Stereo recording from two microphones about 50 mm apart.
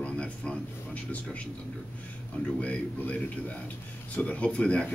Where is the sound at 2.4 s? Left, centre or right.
Left.